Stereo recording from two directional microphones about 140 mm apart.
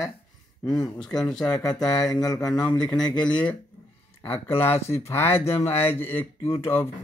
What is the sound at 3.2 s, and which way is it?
Speech, 10° left (ahead or behind).